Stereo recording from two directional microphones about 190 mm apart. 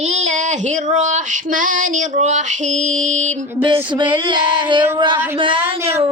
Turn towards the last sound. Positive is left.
turn(degrees=-30)  # may be behind; listen again after turning